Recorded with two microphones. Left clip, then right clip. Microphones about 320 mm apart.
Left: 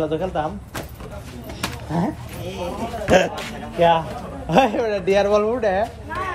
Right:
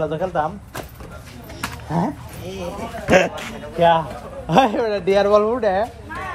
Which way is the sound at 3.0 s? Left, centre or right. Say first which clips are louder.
Right 1 dB; centre.